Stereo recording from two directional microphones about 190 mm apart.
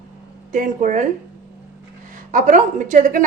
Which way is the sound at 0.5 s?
45° right (ahead or behind).